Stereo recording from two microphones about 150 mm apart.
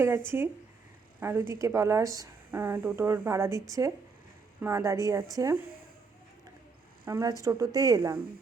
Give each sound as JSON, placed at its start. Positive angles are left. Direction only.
{"t": 1.2, "sound": "a woman's voice", "side_deg": -15}
{"t": 7.0, "sound": "a woman's voice", "side_deg": -20}